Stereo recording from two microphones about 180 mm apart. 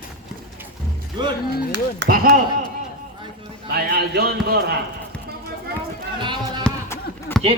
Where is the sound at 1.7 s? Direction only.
65° right (ahead or behind).